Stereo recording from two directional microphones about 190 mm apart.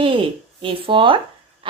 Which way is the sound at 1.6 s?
25° right (ahead or behind).